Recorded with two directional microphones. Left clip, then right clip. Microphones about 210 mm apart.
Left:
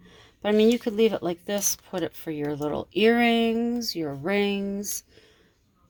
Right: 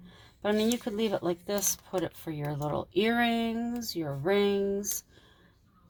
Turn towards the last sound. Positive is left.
turn(degrees=45)  # may be behind; listen again after turning